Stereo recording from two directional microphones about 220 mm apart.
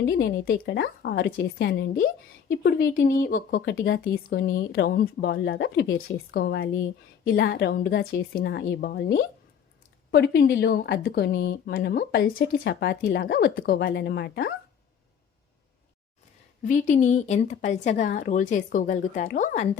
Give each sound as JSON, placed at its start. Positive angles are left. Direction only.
{"t": 0.0, "sound": "speech", "side_deg": 50}
{"t": 16.6, "sound": "a woman's voice", "side_deg": 35}